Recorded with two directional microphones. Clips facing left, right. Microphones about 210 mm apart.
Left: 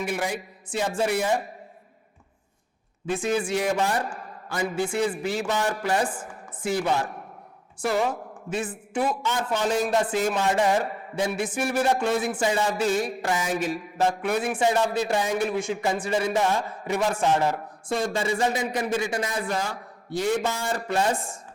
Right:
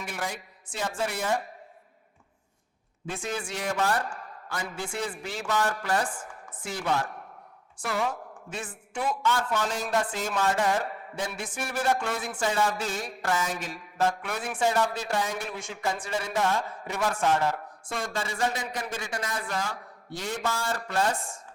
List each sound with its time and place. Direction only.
0.0 s a man's voice: 10° left (ahead or behind)
3.2 s a man's voice: 5° left (ahead or behind)
5.5 s a man's voice: 20° left (ahead or behind)
6.2 s chopping: 5° left (ahead or behind)
7.0 s a sound: 10° left (ahead or behind)
7.9 s speech: 20° left (ahead or behind)
8.1 s a man's voice: 5° left (ahead or behind)
9.2 s a man's voice: 20° left (ahead or behind)
16.6 s a man's voice: 10° left (ahead or behind)
17.0 s a man's voice: 20° left (ahead or behind)